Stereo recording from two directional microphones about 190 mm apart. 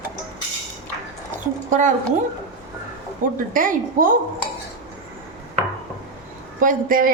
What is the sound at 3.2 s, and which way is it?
Speech, 45° right (ahead or behind).